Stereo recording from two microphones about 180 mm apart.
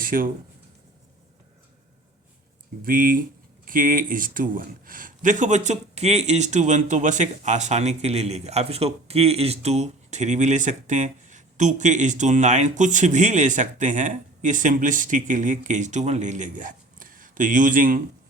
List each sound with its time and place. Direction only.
0.0 s speech: 50° right (ahead or behind)
2.8 s speech: 50° right (ahead or behind)